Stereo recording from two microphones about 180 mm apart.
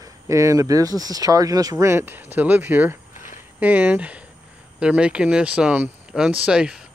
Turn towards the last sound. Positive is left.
turn(degrees=-5)  # may be behind; listen again after turning